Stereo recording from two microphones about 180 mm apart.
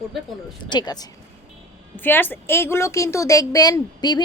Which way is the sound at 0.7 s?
25° left (ahead or behind).